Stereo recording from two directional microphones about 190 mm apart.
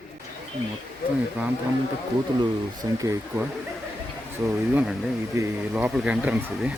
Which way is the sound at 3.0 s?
15° right (ahead or behind).